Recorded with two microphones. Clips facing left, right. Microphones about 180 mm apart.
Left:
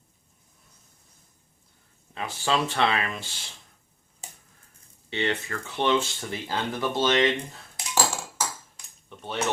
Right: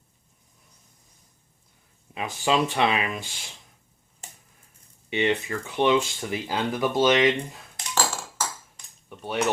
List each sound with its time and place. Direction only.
2.1 s speech: 20° right (ahead or behind)
5.1 s speech: 15° right (ahead or behind)
7.8 s dishes: 5° left (ahead or behind)
8.7 s cutlery: 10° right (ahead or behind)